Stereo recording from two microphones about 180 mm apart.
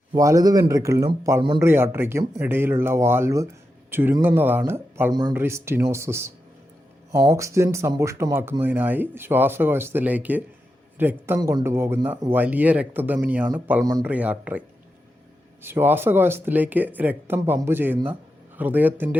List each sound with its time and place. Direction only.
0.1 s speech: 20° right (ahead or behind)
13.8 s speech: 20° right (ahead or behind)
14.1 s speech: 10° right (ahead or behind)
15.6 s speech: 10° right (ahead or behind)